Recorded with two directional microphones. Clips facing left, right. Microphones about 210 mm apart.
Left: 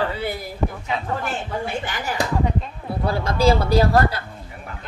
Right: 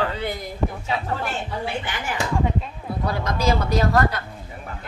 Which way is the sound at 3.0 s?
30° left (ahead or behind).